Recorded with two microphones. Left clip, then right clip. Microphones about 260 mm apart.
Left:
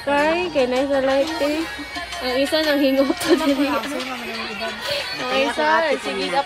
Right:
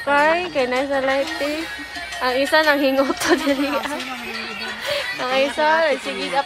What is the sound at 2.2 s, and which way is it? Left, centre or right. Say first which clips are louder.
Speech: right 3 dB; centre.